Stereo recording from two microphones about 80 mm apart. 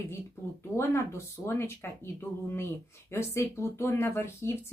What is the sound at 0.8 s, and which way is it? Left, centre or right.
Speech, left.